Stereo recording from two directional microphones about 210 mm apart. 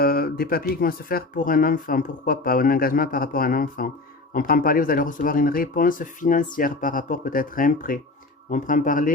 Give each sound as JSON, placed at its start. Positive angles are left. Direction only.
{"t": 0.0, "sound": "speech", "side_deg": 45}